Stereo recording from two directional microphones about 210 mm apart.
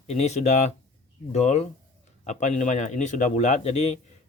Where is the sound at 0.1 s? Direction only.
30° left (ahead or behind).